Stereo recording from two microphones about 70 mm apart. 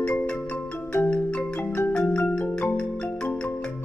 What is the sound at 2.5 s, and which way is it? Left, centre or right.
Music, centre.